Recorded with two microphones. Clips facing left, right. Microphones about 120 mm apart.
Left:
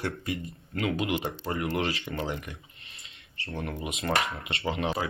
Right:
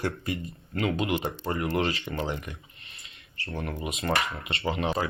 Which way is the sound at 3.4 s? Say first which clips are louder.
Right 1 dB; centre (ahead or behind).